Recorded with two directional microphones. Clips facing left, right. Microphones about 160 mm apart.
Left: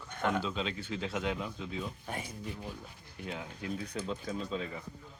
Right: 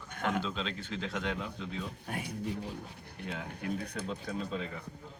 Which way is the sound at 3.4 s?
60° right (ahead or behind).